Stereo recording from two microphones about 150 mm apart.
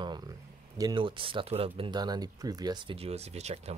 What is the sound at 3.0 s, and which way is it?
Speech, 45° right (ahead or behind).